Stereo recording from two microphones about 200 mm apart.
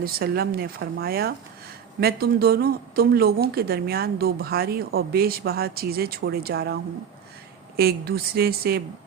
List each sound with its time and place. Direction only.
0.0 s speech: 50° right (ahead or behind)
7.8 s speech: 50° right (ahead or behind)